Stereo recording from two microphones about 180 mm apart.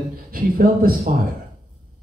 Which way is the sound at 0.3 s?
55° right (ahead or behind).